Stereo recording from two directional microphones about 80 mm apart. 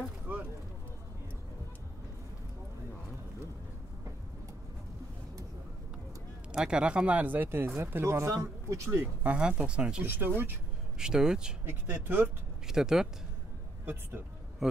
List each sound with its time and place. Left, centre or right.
0.3 s a sound: centre
6.5 s speech: centre
7.4 s speech: right
9.2 s speech: centre
10.0 s speech: right
11.0 s speech: centre
12.6 s speech: centre
14.6 s a man's voice: centre